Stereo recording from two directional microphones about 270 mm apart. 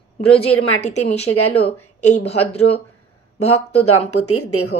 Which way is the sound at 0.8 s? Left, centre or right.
Left.